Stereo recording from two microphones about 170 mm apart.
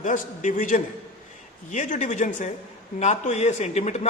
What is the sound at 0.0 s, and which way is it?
A man's voice, 50° left (ahead or behind).